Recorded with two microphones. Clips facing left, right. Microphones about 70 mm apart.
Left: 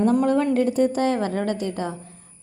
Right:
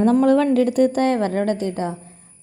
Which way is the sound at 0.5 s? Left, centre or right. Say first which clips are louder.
Right 3 dB; right.